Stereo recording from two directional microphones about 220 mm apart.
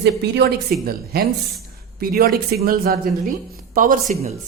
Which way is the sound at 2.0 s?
40° right (ahead or behind).